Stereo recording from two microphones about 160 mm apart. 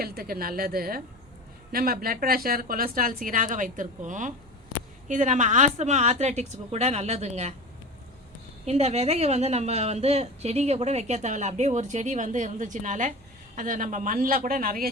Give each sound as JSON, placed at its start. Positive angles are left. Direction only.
{"t": 0.0, "sound": "a woman's voice", "side_deg": -70}
{"t": 8.6, "sound": "a woman's voice", "side_deg": -40}